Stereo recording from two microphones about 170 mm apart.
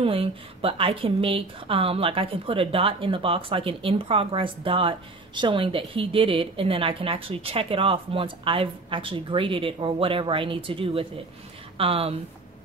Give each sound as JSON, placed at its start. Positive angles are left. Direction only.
{"t": 0.0, "sound": "speech", "side_deg": -35}